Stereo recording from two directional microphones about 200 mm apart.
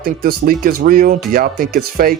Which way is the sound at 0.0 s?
45° right (ahead or behind).